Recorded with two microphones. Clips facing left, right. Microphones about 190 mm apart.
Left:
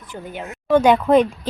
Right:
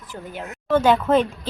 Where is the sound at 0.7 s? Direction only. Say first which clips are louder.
Left 3 dB; 15° left (ahead or behind).